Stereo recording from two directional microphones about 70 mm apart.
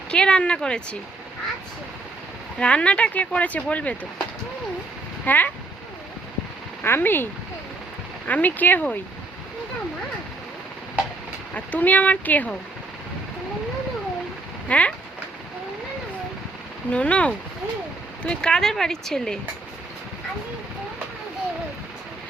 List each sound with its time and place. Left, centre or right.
0.1 s speech: centre
2.6 s speech: centre
5.2 s speech: left
6.8 s speech: left
8.3 s speech: left
11.5 s speech: left
14.7 s speech: centre
16.9 s speech: centre